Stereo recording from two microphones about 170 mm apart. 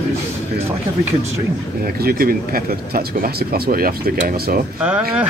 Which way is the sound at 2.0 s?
60° right (ahead or behind).